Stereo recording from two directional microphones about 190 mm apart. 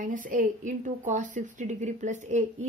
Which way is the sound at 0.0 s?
45° right (ahead or behind).